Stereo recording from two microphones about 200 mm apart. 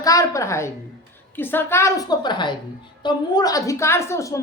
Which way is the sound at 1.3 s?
10° left (ahead or behind).